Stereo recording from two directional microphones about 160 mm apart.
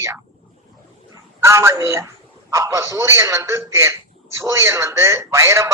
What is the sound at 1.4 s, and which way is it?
A man's voice, 15° right (ahead or behind).